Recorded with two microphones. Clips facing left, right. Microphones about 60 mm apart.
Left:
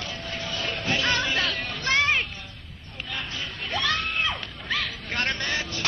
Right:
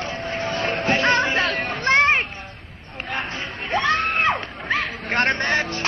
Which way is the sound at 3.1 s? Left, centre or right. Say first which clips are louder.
Right 6 dB; right.